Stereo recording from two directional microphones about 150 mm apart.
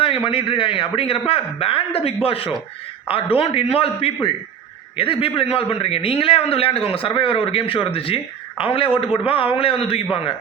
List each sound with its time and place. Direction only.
0.3 s a man's voice: 35° left (ahead or behind)